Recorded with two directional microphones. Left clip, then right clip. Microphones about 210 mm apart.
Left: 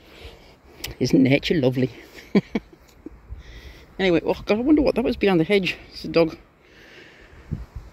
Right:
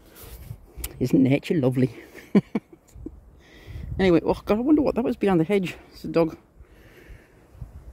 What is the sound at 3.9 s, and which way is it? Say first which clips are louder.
Speech: even; 25° right (ahead or behind).